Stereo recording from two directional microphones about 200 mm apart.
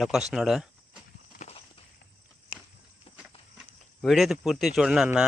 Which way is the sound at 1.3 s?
45° left (ahead or behind).